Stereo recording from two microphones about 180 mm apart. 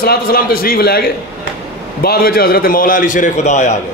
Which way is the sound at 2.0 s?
55° left (ahead or behind).